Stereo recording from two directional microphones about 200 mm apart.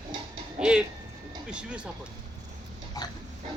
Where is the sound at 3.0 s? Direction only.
20° left (ahead or behind).